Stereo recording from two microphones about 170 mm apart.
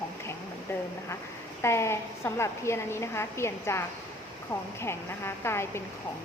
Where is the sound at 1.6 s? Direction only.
15° left (ahead or behind).